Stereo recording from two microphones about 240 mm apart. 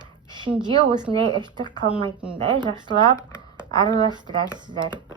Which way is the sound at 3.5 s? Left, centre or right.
Centre.